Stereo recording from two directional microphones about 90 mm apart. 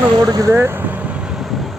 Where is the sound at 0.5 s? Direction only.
25° right (ahead or behind).